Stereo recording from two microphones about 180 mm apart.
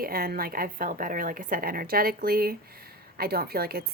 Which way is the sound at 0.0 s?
55° right (ahead or behind).